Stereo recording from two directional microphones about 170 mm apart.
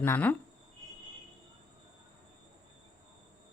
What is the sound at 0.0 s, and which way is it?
Speech, 10° left (ahead or behind).